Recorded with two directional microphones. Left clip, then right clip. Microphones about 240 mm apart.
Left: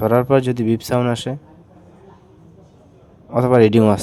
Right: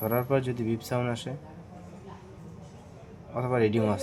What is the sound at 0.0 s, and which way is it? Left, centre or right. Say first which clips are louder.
Speech: left 12 dB; left.